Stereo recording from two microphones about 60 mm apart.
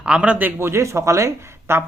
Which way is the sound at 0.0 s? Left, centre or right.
Centre.